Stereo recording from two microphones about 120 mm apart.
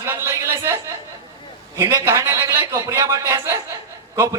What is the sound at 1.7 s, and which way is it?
A man's voice, 20° right (ahead or behind).